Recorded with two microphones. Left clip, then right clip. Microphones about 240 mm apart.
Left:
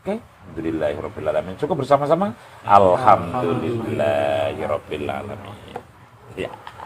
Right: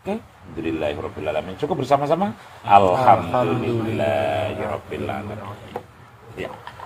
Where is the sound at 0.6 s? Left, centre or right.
Centre.